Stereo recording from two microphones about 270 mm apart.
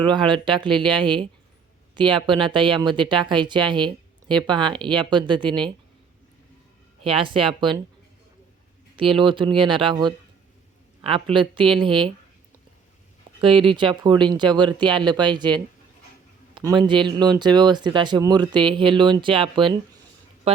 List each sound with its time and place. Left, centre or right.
0.0 s speech: centre
7.0 s speech: centre
9.0 s speech: centre
13.4 s speech: centre